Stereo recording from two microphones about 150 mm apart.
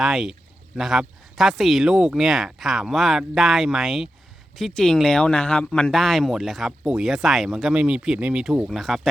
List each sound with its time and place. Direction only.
0.0 s speech: 5° right (ahead or behind)